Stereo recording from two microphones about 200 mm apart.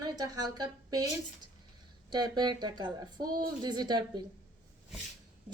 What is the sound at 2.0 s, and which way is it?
Speech, 20° right (ahead or behind).